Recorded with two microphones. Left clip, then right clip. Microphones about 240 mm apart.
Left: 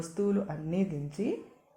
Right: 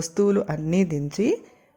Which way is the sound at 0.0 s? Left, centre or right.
Right.